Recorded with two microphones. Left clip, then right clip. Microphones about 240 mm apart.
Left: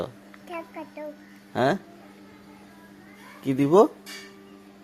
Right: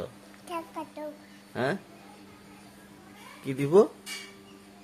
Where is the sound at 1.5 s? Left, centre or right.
Left.